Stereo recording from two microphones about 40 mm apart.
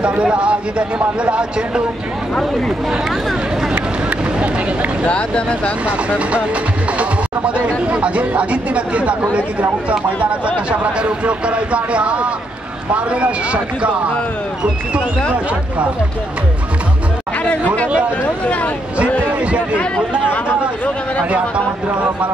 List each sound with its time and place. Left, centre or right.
0.2 s speech: right
5.0 s speech: left
5.9 s speech: right
17.4 s speech: left
18.4 s a sound: left
19.3 s a sound: right
20.2 s chatter: left